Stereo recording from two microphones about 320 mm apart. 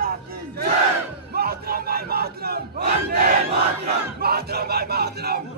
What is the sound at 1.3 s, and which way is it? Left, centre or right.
Battle cry, right.